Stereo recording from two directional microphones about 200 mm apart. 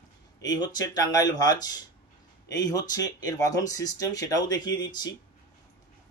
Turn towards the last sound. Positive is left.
turn(degrees=20)  # may be behind; listen again after turning